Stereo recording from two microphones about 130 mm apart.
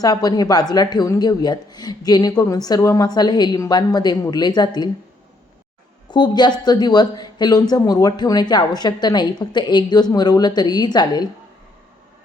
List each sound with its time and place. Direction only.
0.0 s speech: 30° left (ahead or behind)
6.1 s a woman's voice: 35° left (ahead or behind)